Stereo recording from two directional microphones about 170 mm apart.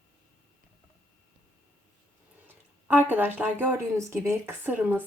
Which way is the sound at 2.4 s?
10° right (ahead or behind).